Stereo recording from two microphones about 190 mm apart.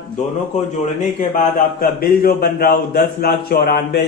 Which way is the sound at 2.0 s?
50° left (ahead or behind).